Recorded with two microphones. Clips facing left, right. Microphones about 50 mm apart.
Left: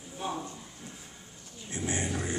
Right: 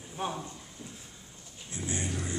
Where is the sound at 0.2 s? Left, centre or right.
Right.